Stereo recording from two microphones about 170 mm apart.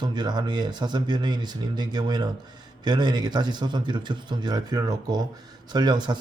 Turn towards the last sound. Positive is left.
turn(degrees=-25)  # may be behind; listen again after turning